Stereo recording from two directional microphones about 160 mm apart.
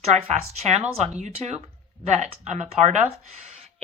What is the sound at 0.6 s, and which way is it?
A woman's voice, 40° right (ahead or behind).